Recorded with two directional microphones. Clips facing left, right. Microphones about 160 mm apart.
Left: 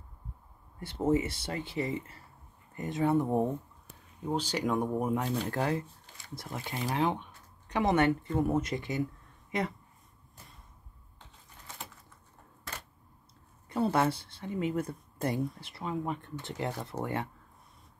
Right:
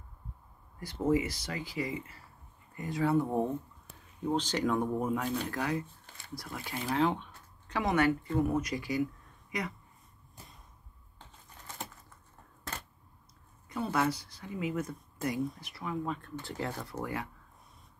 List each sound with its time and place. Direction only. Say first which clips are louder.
0.9 s speech: left 1 dB; 25° left (ahead or behind)
13.7 s speech: left 3 dB; 30° left (ahead or behind)